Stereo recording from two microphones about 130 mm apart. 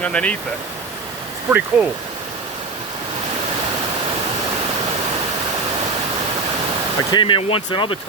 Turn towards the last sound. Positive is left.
turn(degrees=40)  # may be behind; listen again after turning